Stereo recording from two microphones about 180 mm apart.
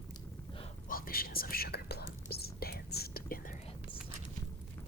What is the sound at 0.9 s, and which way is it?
Whispering, 55° left (ahead or behind).